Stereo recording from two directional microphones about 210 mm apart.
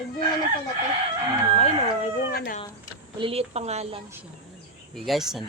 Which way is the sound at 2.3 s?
45° left (ahead or behind).